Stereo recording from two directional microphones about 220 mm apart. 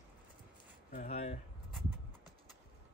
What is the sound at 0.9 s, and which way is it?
Speech, 30° left (ahead or behind).